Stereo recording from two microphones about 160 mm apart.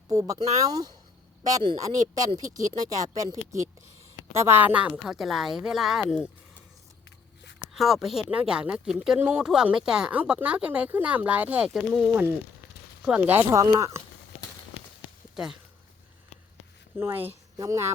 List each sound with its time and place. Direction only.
0.1 s a woman's voice: 20° right (ahead or behind); by 6.3 s 5° right (ahead or behind)
7.6 s speech: centre (ahead or behind); by 14.0 s 20° right (ahead or behind)
17.0 s speech: 15° right (ahead or behind)